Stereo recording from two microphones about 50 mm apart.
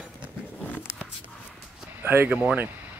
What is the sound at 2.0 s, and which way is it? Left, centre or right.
Speech, right.